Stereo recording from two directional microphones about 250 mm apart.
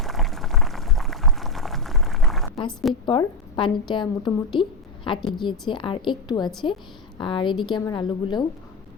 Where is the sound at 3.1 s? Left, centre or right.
Centre.